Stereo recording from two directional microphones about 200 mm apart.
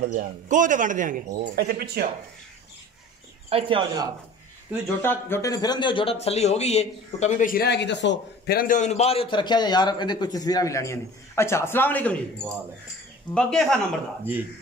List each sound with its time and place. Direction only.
0.0 s a man's voice: 40° right (ahead or behind)
3.4 s speech: 25° right (ahead or behind)
5.0 s speech: 10° left (ahead or behind)
13.3 s speech: 5° left (ahead or behind)